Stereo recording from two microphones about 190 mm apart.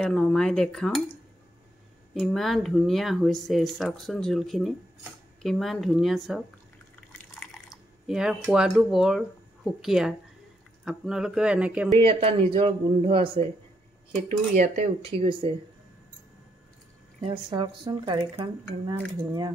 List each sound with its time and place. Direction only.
0.0 s speech: 5° left (ahead or behind)
2.1 s speech: centre (ahead or behind)
7.1 s drip: 5° left (ahead or behind)
8.1 s speech: centre (ahead or behind)
12.0 s speech: 30° right (ahead or behind)
14.5 s speech: 40° right (ahead or behind)
17.3 s speech: 25° right (ahead or behind)